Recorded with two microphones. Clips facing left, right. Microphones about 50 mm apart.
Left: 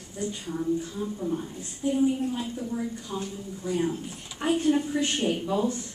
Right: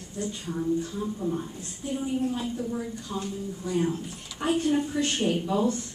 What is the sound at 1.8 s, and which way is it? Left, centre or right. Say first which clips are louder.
Speech: left 5 dB; centre.